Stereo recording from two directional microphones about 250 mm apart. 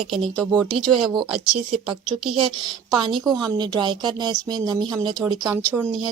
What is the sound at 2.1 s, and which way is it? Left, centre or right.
Speech, centre.